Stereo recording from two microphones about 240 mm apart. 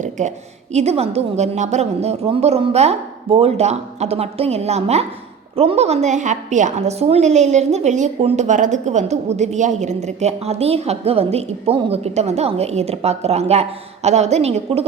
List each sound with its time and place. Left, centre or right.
0.0 s a woman's voice: right